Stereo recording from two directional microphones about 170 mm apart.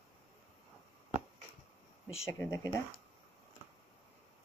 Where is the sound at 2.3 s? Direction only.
15° left (ahead or behind).